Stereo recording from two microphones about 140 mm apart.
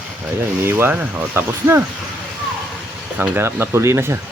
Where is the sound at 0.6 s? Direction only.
15° right (ahead or behind).